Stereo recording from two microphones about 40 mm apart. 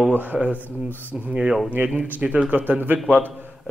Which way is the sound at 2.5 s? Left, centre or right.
Right.